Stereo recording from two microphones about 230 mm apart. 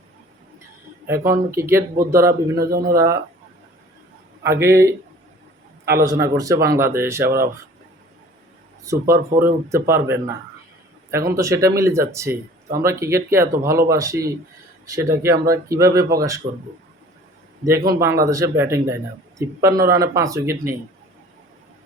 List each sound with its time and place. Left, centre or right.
1.0 s speech: centre
2.6 s speech: right
2.9 s speech: centre
4.4 s speech: centre
6.0 s speech: centre
8.8 s speech: centre
17.6 s speech: centre